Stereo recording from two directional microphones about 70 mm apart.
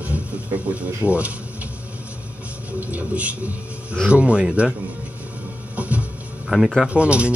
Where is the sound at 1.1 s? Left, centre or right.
Centre.